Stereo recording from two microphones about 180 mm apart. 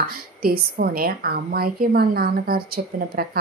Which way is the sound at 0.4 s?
55° right (ahead or behind).